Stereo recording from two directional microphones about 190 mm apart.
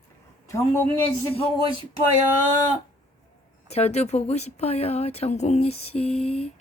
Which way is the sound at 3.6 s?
35° left (ahead or behind).